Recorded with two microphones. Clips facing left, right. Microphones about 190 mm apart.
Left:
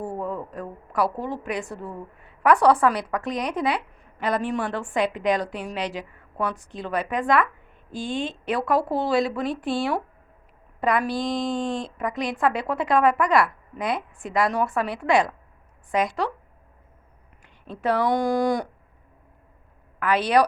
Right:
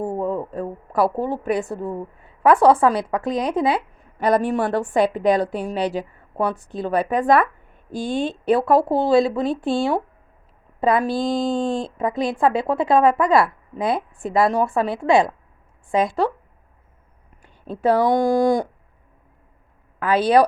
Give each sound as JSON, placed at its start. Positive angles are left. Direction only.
{"t": 0.0, "sound": "a woman's voice", "side_deg": -30}
{"t": 4.2, "sound": "a woman's voice", "side_deg": -40}
{"t": 17.8, "sound": "a woman's voice", "side_deg": -30}
{"t": 20.0, "sound": "a woman's voice", "side_deg": -30}